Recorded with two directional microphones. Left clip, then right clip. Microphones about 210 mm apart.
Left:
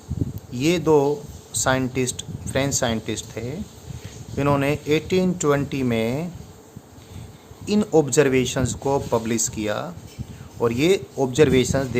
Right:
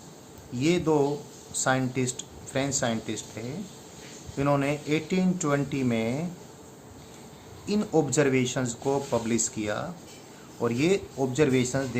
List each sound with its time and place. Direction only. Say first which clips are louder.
0.5 s speech: left 6 dB; 50° left (ahead or behind)
7.7 s speech: left 6 dB; 50° left (ahead or behind)